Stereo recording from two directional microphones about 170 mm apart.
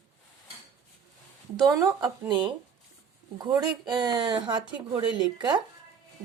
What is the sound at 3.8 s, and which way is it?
Speech, 25° right (ahead or behind).